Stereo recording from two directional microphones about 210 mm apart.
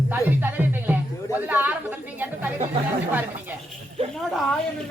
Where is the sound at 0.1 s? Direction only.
10° right (ahead or behind).